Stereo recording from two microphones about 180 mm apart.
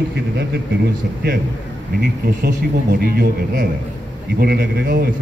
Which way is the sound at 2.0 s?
65° right (ahead or behind).